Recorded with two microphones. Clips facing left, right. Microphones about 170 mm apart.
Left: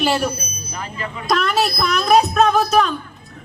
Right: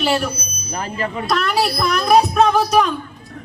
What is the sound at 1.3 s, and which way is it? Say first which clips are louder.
A woman's voice: even; 10° right (ahead or behind).